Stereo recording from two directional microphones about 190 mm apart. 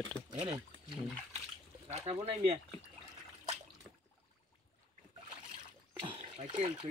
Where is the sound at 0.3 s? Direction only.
25° right (ahead or behind).